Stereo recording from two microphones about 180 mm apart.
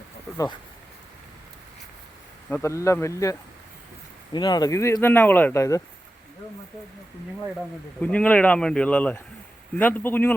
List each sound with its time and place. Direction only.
2.5 s speech: 15° left (ahead or behind)
8.0 s speech: 10° left (ahead or behind)